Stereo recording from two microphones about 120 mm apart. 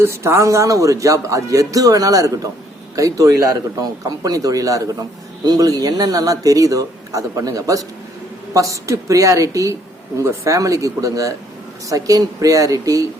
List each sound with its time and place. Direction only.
0.0 s speech: 20° right (ahead or behind)